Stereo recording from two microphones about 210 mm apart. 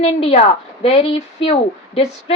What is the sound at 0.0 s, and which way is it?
A woman's voice, 30° left (ahead or behind).